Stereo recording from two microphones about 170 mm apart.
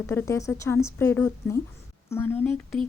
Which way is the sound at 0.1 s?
15° left (ahead or behind).